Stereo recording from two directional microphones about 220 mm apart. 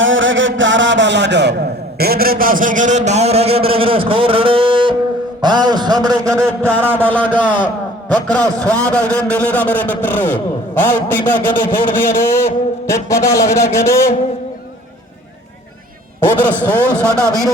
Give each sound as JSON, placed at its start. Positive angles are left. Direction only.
{"t": 0.0, "sound": "a man's voice", "side_deg": -60}
{"t": 7.0, "sound": "a man's voice", "side_deg": 5}
{"t": 16.2, "sound": "a man's voice", "side_deg": 10}
{"t": 16.9, "sound": "a man's voice", "side_deg": -15}